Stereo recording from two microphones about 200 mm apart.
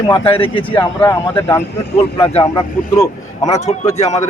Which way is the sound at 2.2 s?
30° left (ahead or behind).